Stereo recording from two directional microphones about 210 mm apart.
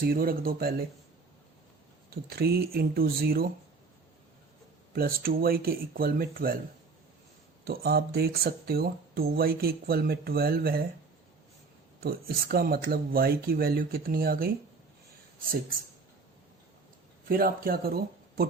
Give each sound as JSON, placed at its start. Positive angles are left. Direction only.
{"t": 0.1, "sound": "speech", "side_deg": -45}
{"t": 2.3, "sound": "speech", "side_deg": -45}
{"t": 4.9, "sound": "speech", "side_deg": -45}
{"t": 7.6, "sound": "speech", "side_deg": -45}
{"t": 11.9, "sound": "speech", "side_deg": -45}
{"t": 17.2, "sound": "speech", "side_deg": -45}